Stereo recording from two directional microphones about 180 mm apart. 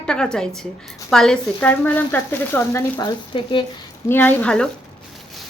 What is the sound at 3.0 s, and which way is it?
Speech, 25° left (ahead or behind).